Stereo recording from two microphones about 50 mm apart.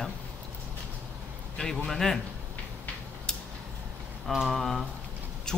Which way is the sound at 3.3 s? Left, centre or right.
Centre.